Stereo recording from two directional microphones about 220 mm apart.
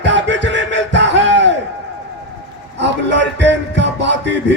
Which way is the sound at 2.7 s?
55° right (ahead or behind).